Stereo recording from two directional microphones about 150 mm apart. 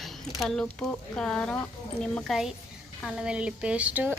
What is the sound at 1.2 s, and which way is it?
Speech, 5° left (ahead or behind).